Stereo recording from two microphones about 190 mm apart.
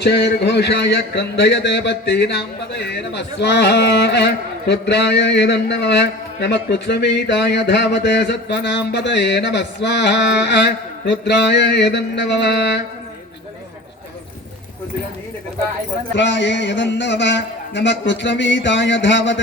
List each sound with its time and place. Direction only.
0.0 s speech: 60° left (ahead or behind)
16.1 s a man's voice: 70° left (ahead or behind)